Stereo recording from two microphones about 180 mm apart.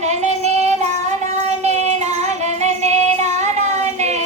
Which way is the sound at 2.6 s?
40° right (ahead or behind).